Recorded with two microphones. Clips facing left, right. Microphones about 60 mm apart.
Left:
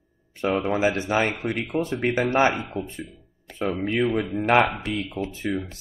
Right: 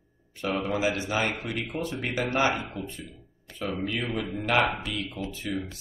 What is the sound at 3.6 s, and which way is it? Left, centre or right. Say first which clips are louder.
Speech: left 7 dB; left.